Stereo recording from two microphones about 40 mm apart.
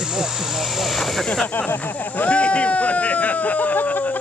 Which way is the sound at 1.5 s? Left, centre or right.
Left.